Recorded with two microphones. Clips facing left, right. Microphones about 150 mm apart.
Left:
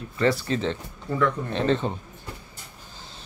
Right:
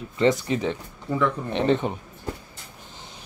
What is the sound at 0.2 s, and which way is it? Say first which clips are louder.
Speech: right 2 dB; 20° right (ahead or behind).